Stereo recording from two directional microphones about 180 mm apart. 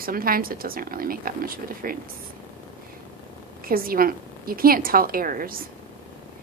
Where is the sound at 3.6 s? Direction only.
55° right (ahead or behind).